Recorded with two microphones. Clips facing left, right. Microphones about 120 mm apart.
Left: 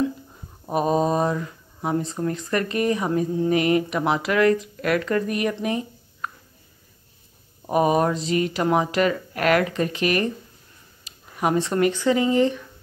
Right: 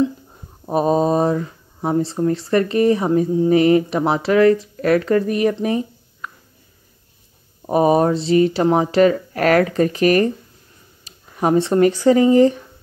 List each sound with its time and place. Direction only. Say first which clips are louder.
0.7 s speech: right 4 dB; 35° right (ahead or behind)
7.7 s speech: right 5 dB; 35° right (ahead or behind)